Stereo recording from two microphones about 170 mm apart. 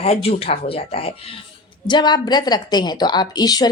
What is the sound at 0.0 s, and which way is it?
A woman's voice, 35° left (ahead or behind).